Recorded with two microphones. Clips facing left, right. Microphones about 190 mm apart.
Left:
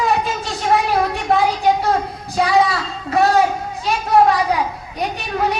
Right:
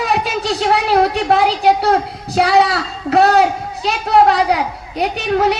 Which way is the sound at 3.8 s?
75° right (ahead or behind).